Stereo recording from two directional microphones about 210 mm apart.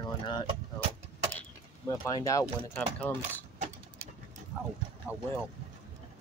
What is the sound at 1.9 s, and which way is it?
Speech, 15° left (ahead or behind).